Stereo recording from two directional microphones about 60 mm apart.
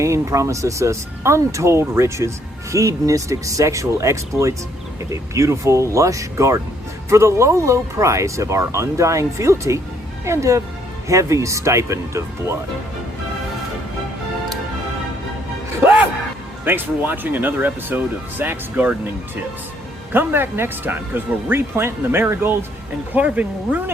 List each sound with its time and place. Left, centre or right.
0.0 s speech: right
2.7 s speech: right
15.8 s music: right
16.6 s speech: right
20.1 s speech: right
23.1 s speech: right